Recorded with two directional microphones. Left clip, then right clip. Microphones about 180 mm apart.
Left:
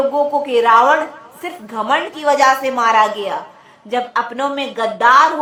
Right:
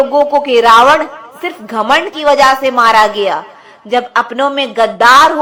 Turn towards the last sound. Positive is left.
turn(degrees=-30)  # may be behind; listen again after turning